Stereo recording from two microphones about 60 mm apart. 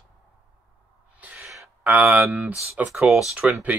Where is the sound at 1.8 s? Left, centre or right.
Right.